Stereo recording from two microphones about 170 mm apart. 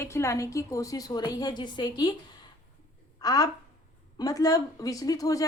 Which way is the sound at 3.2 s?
20° left (ahead or behind).